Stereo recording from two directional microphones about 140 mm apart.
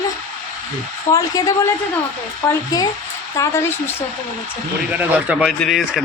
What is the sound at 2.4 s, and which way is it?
A woman's voice, 25° left (ahead or behind).